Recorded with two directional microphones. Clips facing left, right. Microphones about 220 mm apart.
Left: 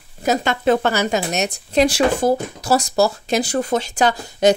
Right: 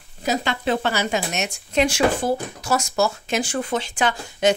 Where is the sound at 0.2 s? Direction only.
50° left (ahead or behind).